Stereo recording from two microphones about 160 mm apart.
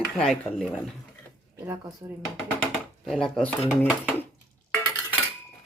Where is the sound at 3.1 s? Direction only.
5° left (ahead or behind).